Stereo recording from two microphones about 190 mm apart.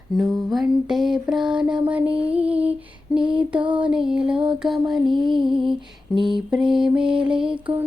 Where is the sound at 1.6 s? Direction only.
5° right (ahead or behind).